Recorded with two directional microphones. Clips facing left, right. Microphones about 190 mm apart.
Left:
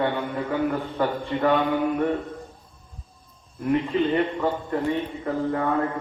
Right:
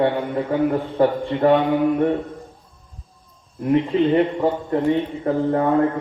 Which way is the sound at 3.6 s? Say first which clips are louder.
Right 5 dB; 35° right (ahead or behind).